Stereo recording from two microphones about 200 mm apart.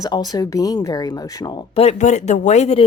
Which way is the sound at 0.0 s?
20° left (ahead or behind).